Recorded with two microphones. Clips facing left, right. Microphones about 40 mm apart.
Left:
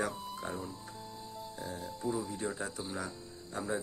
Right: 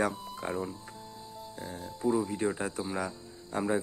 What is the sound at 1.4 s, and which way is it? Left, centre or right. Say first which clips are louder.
Music: right 1 dB; centre.